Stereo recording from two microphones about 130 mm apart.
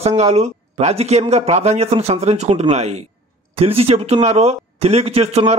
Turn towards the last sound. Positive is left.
turn(degrees=-55)  # may be behind; listen again after turning